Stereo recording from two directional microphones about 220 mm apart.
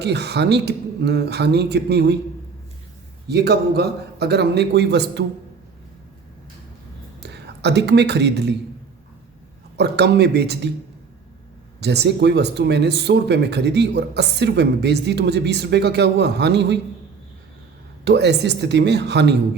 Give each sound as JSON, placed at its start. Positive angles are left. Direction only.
{"t": 0.0, "sound": "speech", "side_deg": -50}
{"t": 3.2, "sound": "speech", "side_deg": -50}
{"t": 7.2, "sound": "a man's voice", "side_deg": -50}
{"t": 9.7, "sound": "speech", "side_deg": -50}
{"t": 11.8, "sound": "speech", "side_deg": -50}
{"t": 18.0, "sound": "speech", "side_deg": -50}